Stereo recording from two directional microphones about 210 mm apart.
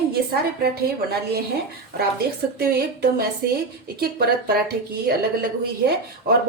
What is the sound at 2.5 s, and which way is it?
A woman's voice, 50° right (ahead or behind).